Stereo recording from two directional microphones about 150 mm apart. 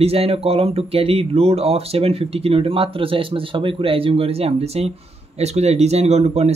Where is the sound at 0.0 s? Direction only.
40° right (ahead or behind).